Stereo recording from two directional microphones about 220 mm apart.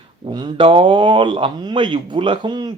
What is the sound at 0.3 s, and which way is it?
Speech, 20° right (ahead or behind).